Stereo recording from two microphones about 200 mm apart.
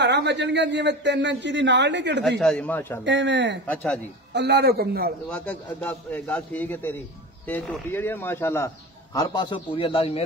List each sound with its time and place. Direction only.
0.0 s a man's voice: 60° right (ahead or behind)
2.2 s speech: 5° left (ahead or behind)
3.1 s a man's voice: 60° right (ahead or behind)
3.6 s speech: 5° left (ahead or behind)
4.3 s a man's voice: 55° right (ahead or behind)
5.3 s speech: 5° left (ahead or behind); by 10.2 s 30° left (ahead or behind)